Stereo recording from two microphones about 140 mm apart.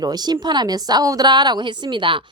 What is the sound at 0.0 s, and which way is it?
Speech, 30° right (ahead or behind).